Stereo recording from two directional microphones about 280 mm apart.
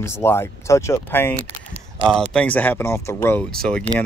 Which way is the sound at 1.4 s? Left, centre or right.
Right.